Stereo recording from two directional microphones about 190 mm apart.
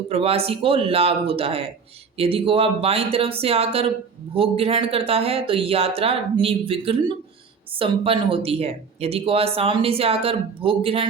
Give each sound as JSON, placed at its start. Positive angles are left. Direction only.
{"t": 0.1, "sound": "speech", "side_deg": -30}